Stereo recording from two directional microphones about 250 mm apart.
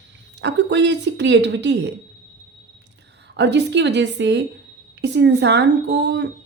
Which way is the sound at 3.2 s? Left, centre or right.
Right.